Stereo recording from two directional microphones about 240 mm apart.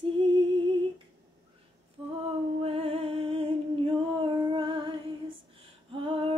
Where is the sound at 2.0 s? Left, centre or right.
Right.